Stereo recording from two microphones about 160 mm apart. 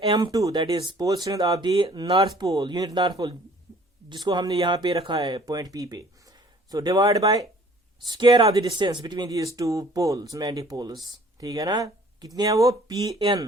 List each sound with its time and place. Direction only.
0.0 s speech: 30° right (ahead or behind)
13.1 s speech: 30° right (ahead or behind)